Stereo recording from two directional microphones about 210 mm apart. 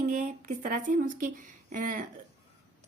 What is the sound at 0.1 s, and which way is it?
Speech, 35° right (ahead or behind).